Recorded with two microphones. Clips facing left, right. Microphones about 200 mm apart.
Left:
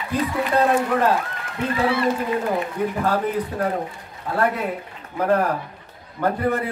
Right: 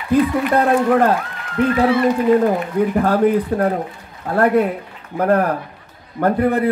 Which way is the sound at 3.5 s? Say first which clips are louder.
Right 6 dB; 45° right (ahead or behind).